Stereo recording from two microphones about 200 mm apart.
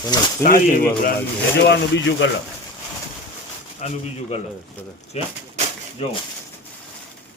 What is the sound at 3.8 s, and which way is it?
Speech, 35° left (ahead or behind).